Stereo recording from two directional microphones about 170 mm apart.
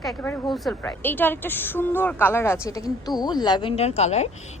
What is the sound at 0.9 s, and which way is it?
A woman's voice, 10° left (ahead or behind).